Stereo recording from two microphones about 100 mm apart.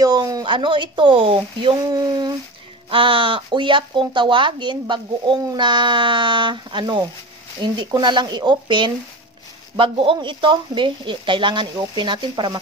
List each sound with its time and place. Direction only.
0.0 s speech: 40° right (ahead or behind); by 1.8 s 60° right (ahead or behind)
1.9 s a sound: 40° right (ahead or behind)
2.9 s speech: 60° right (ahead or behind)
9.8 s speech: 60° right (ahead or behind)